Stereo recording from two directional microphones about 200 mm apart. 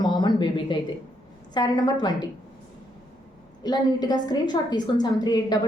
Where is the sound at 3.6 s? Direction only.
20° left (ahead or behind).